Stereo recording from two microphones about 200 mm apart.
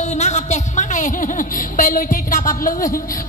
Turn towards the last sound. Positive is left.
turn(degrees=45)  # may be behind; listen again after turning